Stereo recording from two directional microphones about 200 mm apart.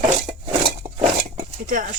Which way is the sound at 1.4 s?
40° right (ahead or behind).